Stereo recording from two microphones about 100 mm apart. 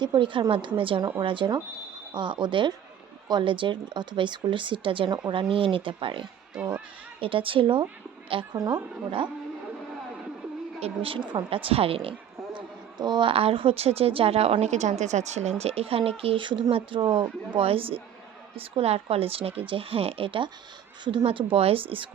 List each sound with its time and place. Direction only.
0.0 s speech: 55° right (ahead or behind)
6.5 s speech: 10° right (ahead or behind)
7.2 s speech: 60° right (ahead or behind)
8.5 s speech: 35° right (ahead or behind)
9.0 s speech: 60° right (ahead or behind)
10.8 s speech: 80° right
12.5 s speech: 50° right (ahead or behind)